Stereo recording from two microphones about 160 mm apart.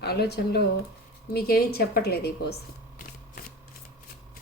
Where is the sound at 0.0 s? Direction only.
90° left.